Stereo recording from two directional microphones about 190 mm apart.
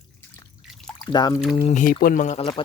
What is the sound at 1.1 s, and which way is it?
Speech, 20° left (ahead or behind).